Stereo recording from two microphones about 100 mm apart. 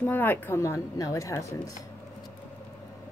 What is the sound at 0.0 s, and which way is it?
Speech, 20° left (ahead or behind).